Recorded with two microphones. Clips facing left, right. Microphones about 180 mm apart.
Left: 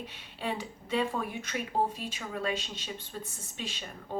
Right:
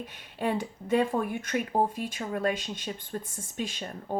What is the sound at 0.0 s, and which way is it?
Speech, 50° right (ahead or behind).